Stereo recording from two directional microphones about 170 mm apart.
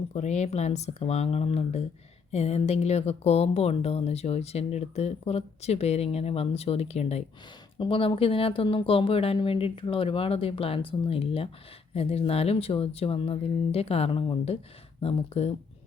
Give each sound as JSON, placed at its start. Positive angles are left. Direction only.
{"t": 0.1, "sound": "speech", "side_deg": 40}